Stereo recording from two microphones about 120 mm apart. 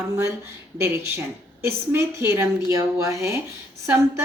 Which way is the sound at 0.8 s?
20° right (ahead or behind).